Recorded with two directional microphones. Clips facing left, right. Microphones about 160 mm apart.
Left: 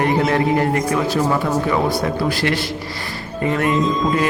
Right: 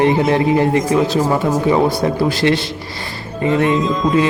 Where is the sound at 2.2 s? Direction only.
25° right (ahead or behind).